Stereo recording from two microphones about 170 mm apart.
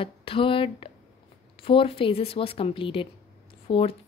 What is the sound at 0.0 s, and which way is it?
A woman's voice, 30° left (ahead or behind).